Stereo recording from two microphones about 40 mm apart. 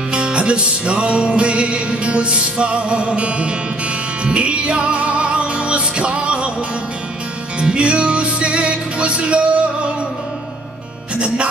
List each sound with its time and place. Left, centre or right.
0.1 s music: right
7.5 s music: right
11.1 s speech: right